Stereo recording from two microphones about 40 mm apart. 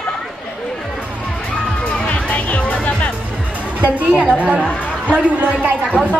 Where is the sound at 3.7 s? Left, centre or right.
Right.